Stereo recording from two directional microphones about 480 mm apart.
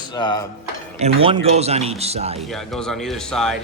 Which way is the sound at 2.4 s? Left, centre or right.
Centre.